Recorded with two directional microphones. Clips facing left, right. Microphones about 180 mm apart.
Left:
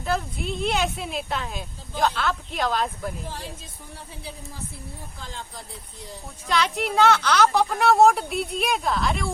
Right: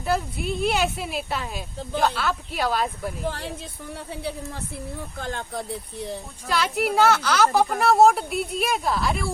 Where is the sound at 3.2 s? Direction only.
65° right (ahead or behind).